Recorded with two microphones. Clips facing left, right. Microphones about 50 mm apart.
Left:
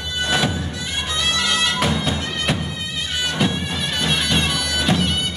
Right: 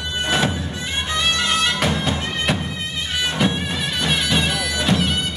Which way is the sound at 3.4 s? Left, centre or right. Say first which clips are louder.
Even; centre.